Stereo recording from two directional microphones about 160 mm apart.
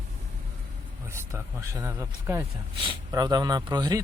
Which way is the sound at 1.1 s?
15° right (ahead or behind).